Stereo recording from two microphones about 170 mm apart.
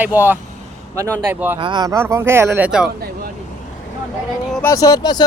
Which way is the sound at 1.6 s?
25° right (ahead or behind).